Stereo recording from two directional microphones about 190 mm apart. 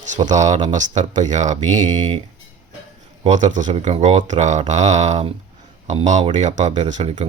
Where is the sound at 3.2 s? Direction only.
40° right (ahead or behind).